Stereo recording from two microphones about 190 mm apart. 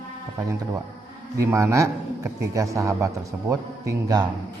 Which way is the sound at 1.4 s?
15° right (ahead or behind).